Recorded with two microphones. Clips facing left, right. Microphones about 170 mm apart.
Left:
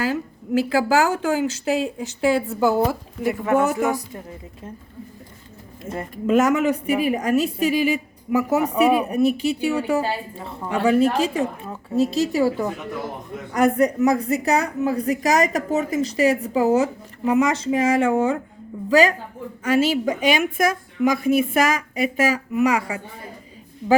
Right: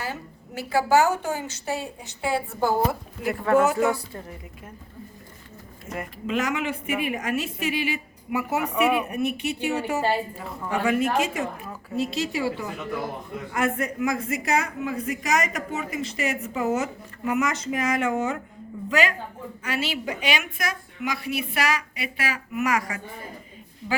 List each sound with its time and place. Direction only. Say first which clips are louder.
0.0 s a woman's voice: left 10 dB; 90° left
3.4 s music: even; 15° left (ahead or behind)
5.9 s speech: left 4 dB; 30° left (ahead or behind)
6.2 s a man's voice: left 9 dB; 45° left (ahead or behind)
22.6 s speech: left 5 dB; 30° left (ahead or behind)